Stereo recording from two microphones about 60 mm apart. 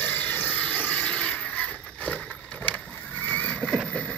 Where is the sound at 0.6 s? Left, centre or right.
Left.